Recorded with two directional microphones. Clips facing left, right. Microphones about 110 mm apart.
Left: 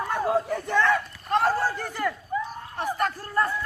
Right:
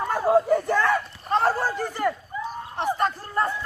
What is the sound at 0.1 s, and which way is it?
Crowd, 5° right (ahead or behind).